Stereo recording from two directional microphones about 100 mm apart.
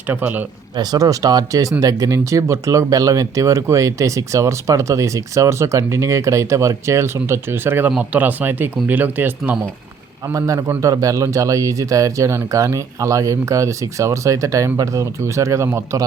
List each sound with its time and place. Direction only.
0.1 s speech: 15° right (ahead or behind)
0.8 s speech: 40° right (ahead or behind); by 9.3 s 20° right (ahead or behind)
10.3 s speech: 35° right (ahead or behind)